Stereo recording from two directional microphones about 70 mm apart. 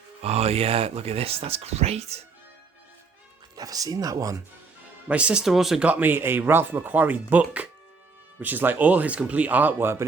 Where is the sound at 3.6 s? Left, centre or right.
Right.